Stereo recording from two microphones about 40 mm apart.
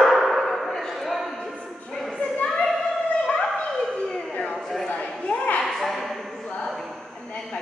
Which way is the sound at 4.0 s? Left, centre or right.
Centre.